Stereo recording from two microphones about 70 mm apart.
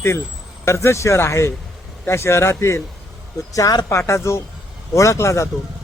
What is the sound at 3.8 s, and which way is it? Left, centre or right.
Speech, left.